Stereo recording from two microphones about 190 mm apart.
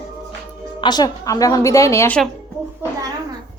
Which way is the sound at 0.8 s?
20° left (ahead or behind).